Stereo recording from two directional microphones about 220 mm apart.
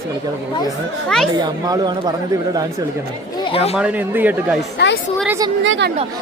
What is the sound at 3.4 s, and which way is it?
Speech, 25° left (ahead or behind).